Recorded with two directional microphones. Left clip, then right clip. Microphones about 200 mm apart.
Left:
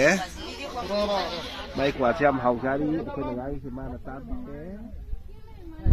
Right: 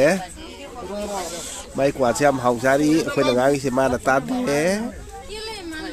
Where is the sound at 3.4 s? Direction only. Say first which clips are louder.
Right 17 dB; 55° right (ahead or behind).